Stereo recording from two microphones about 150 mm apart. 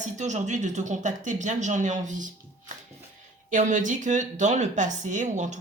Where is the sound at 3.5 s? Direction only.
60° right (ahead or behind).